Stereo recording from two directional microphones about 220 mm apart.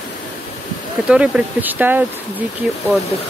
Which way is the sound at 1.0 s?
5° right (ahead or behind).